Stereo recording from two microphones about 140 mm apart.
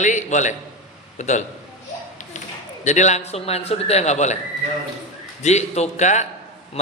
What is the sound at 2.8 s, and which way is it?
A man's voice, 55° left (ahead or behind).